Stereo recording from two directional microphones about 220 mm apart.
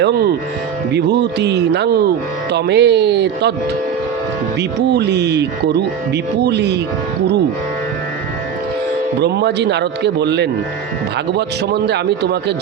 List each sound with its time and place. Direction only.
0.0 s a man's voice: 45° right (ahead or behind)
4.9 s a man's voice: 50° right (ahead or behind)
9.2 s a man's voice: 50° right (ahead or behind)